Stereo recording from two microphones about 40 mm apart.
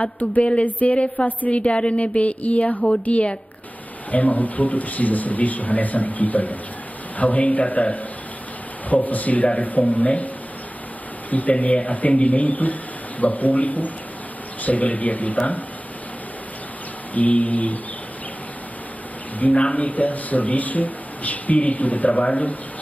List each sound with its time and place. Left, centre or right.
0.0 s speech: left
0.7 s speech: left
0.9 s speech: left
2.7 s speech: centre
3.1 s speech: left
17.1 s speech: left
19.4 s speech: left